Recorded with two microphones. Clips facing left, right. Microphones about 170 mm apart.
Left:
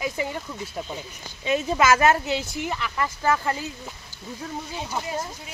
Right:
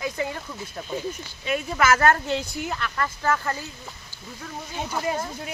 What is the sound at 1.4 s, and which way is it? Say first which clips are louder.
Speech: left 2 dB; 20° left (ahead or behind).